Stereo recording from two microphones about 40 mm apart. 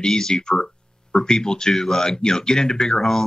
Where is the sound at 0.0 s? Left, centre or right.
Centre.